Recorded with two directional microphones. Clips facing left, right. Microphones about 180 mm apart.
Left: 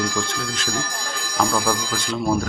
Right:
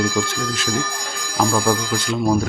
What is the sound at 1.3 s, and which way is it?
Speech, 10° right (ahead or behind).